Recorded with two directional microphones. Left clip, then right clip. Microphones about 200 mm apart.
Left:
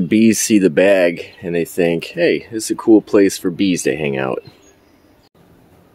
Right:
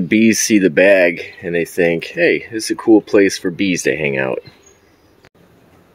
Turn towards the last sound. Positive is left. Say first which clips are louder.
# right 2 dB
turn(degrees=0)  # may be behind; listen again after turning